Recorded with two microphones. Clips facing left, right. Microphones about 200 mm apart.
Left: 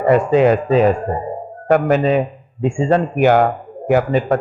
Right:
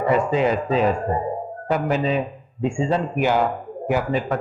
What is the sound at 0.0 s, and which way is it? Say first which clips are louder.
Speech: left 6 dB; 55° left (ahead or behind).